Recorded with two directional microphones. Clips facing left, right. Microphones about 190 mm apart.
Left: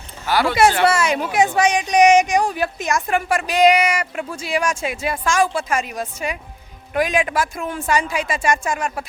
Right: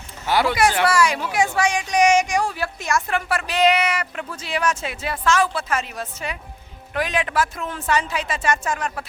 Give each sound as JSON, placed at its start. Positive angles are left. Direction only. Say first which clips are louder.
{"t": 0.3, "sound": "speech", "louder": "even", "side_deg": -25}
{"t": 0.9, "sound": "speech", "louder": "left 1 dB", "side_deg": 25}